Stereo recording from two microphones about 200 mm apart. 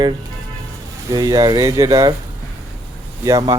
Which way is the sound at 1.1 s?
20° right (ahead or behind).